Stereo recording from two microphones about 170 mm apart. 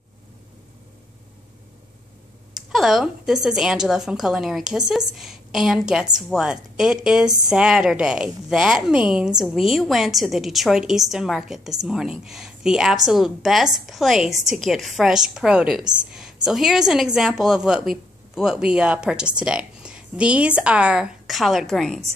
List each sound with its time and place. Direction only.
2.5 s a woman's voice: centre (ahead or behind)